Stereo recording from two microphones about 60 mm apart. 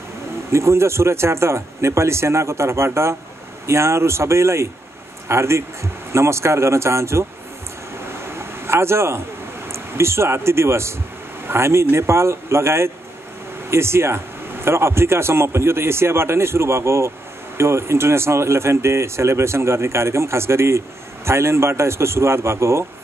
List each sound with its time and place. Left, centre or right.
0.5 s speech: right
8.2 s a sound: right
9.7 s speech: right